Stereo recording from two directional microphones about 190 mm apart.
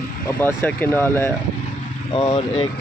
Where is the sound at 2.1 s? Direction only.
25° left (ahead or behind).